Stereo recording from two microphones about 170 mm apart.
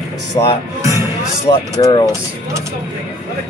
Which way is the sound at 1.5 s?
25° left (ahead or behind).